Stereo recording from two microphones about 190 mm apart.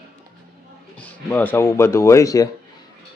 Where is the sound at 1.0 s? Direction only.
10° left (ahead or behind).